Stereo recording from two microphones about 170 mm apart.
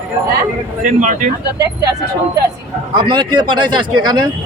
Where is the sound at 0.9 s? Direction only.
50° right (ahead or behind).